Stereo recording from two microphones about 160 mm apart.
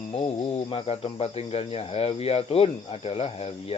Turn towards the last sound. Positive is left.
turn(degrees=40)  # may be behind; listen again after turning